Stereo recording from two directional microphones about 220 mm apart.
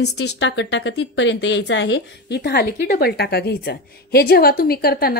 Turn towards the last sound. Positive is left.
turn(degrees=45)  # may be behind; listen again after turning